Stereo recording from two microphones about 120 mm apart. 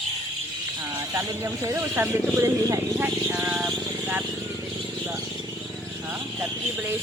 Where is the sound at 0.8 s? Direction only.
25° right (ahead or behind).